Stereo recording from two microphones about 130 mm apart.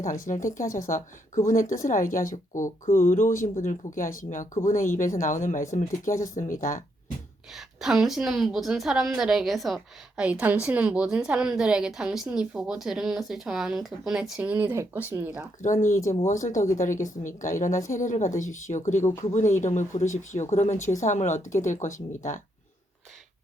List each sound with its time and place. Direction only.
0.0 s speech: 85° left
7.5 s a woman's voice: 5° right (ahead or behind)
15.6 s speech: 75° left (ahead or behind)